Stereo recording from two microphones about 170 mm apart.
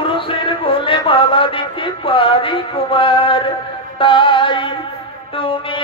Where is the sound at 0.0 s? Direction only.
30° left (ahead or behind).